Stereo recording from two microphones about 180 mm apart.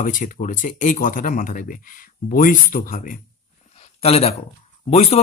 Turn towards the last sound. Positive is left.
turn(degrees=35)  # may be behind; listen again after turning